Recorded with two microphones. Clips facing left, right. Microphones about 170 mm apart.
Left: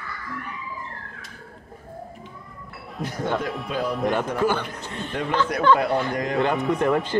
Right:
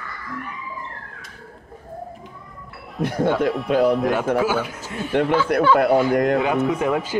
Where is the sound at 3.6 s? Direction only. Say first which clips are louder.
Right 9 dB; 65° right (ahead or behind).